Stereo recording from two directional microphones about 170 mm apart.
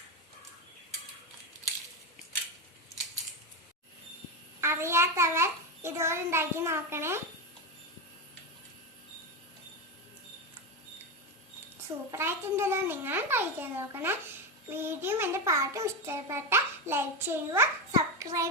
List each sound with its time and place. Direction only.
4.6 s a child's voice: 15° right (ahead or behind)
12.1 s a child's voice: 15° right (ahead or behind)